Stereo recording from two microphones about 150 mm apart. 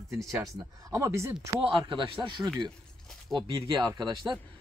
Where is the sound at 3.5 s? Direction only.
25° right (ahead or behind).